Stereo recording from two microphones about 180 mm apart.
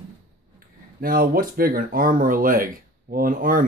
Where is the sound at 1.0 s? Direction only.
55° right (ahead or behind).